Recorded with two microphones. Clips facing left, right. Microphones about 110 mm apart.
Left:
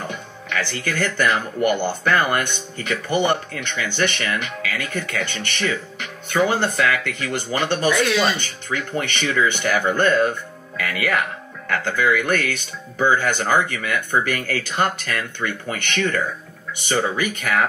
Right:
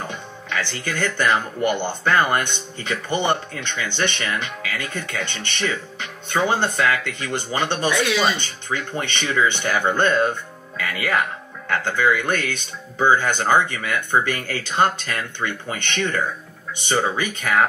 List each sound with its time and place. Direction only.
0.1 s speech: 20° right (ahead or behind)
7.9 s speech: centre (ahead or behind)
8.4 s speech: 20° right (ahead or behind)